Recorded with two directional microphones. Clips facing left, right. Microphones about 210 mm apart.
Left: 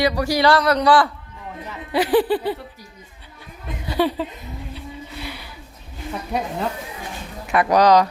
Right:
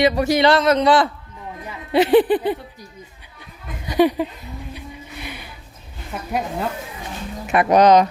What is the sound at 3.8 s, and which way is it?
Speech, 15° right (ahead or behind).